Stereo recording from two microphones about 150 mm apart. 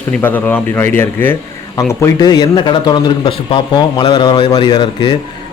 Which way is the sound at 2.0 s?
25° left (ahead or behind).